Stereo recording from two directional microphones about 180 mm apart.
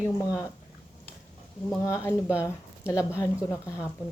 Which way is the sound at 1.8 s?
15° left (ahead or behind).